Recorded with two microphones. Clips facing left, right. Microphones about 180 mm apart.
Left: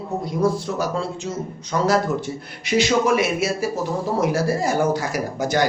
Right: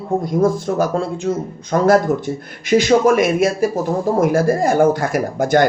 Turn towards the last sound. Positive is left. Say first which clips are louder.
# right 6 dB
turn(degrees=-50)  # may be behind; listen again after turning